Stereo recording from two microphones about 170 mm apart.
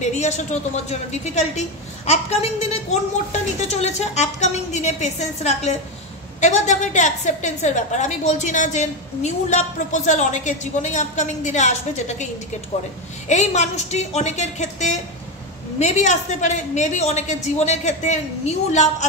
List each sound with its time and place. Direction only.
0.0 s a woman's voice: 45° left (ahead or behind)
13.3 s a woman's voice: 45° left (ahead or behind)